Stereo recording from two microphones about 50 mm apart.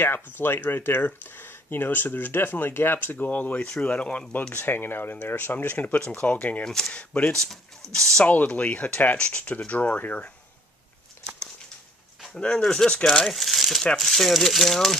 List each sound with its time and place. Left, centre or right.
0.0 s speech: left
3.6 s speech: left
4.6 s speech: left
5.9 s speech: left
6.6 s speech: centre
6.9 s speech: left
7.3 s speech: centre
8.3 s speech: left
12.4 s speech: centre